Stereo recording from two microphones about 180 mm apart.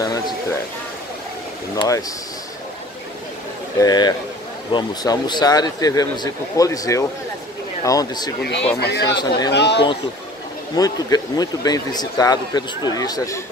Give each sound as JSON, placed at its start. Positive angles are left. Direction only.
{"t": 0.0, "sound": "a sound", "side_deg": 20}
{"t": 1.8, "sound": "speech", "side_deg": 20}
{"t": 3.8, "sound": "speech", "side_deg": 25}
{"t": 8.7, "sound": "speech", "side_deg": 65}
{"t": 10.8, "sound": "speech", "side_deg": 20}